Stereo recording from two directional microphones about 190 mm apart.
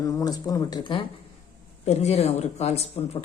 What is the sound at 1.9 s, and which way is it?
Speech, 35° left (ahead or behind).